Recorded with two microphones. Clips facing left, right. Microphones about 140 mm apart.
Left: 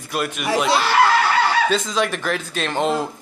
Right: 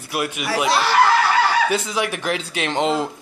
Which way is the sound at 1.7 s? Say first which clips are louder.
Left 1 dB; 10° right (ahead or behind).